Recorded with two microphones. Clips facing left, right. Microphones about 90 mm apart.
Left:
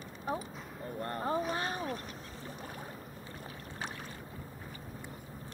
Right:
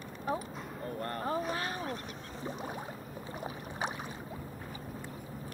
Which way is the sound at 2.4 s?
20° right (ahead or behind).